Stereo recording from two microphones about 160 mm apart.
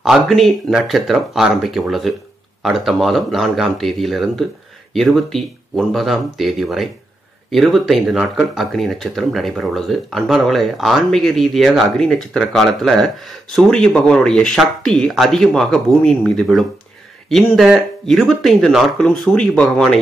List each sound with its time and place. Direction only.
0.0 s speech: centre (ahead or behind)